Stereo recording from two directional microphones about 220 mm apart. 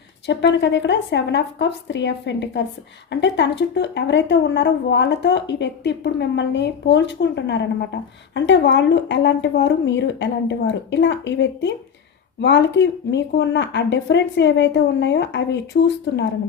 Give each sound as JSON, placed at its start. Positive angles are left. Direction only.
{"t": 0.3, "sound": "a woman's voice", "side_deg": 55}